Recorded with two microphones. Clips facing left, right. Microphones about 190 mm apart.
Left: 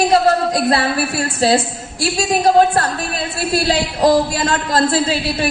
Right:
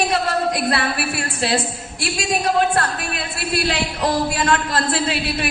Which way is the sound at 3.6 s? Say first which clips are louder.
Left 9 dB; 35° left (ahead or behind).